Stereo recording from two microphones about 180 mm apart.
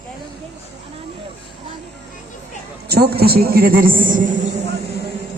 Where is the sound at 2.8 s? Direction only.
60° right (ahead or behind).